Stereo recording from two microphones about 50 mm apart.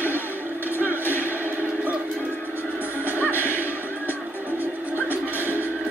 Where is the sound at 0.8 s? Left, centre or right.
Right.